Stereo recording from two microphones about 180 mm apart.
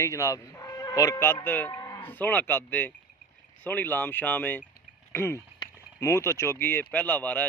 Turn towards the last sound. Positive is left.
turn(degrees=10)  # may be behind; listen again after turning